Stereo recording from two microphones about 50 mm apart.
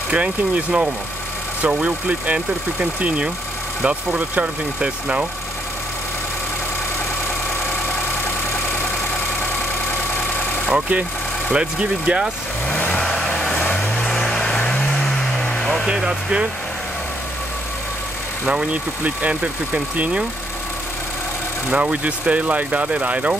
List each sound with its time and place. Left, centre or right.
0.1 s speech: right
10.7 s speech: right
12.6 s vehicle: left
13.0 s vehicle: centre
13.4 s vehicle: left
14.3 s vehicle: centre
15.9 s speech: centre
18.5 s speech: right
21.6 s speech: right